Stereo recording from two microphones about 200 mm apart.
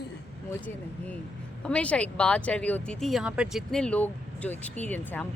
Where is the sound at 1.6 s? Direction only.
5° left (ahead or behind).